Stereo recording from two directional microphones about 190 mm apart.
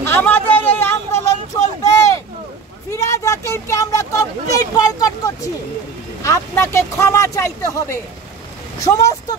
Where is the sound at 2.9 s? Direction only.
15° left (ahead or behind).